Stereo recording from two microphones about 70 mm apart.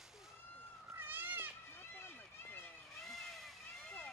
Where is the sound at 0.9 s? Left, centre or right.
Right.